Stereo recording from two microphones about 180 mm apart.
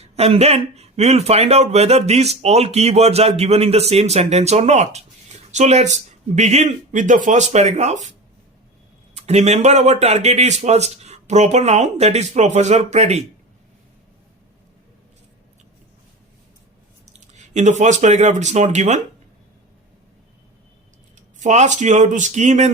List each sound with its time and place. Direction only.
0.0 s a man's voice: 35° right (ahead or behind)
9.1 s a man's voice: 35° right (ahead or behind)
17.3 s a man's voice: 40° right (ahead or behind)
21.3 s a man's voice: 40° right (ahead or behind)